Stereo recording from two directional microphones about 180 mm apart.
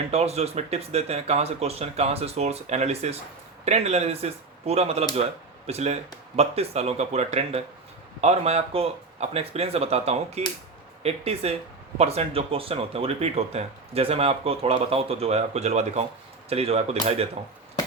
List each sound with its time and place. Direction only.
0.1 s speech: 35° right (ahead or behind)